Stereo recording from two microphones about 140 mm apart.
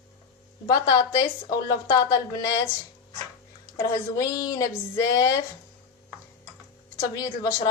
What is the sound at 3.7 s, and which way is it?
Speech, 25° left (ahead or behind).